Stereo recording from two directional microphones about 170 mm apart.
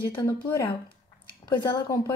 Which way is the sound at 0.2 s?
20° left (ahead or behind).